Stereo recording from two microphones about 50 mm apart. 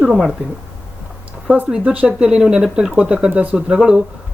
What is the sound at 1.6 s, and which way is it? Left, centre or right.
Speech, centre.